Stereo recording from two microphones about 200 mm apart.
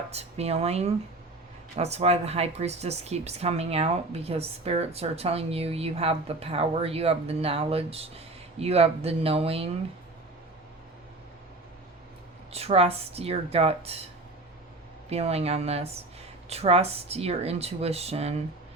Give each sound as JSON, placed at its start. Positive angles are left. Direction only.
{"t": 0.1, "sound": "speech", "side_deg": -30}
{"t": 12.5, "sound": "speech", "side_deg": -30}
{"t": 15.1, "sound": "speech", "side_deg": -30}